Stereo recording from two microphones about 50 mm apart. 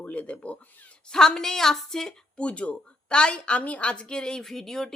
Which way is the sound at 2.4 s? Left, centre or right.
Left.